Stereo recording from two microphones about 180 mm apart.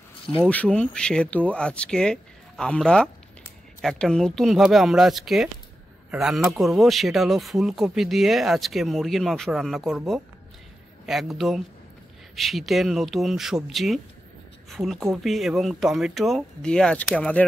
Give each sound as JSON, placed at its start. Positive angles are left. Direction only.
{"t": 0.5, "sound": "speech", "side_deg": 5}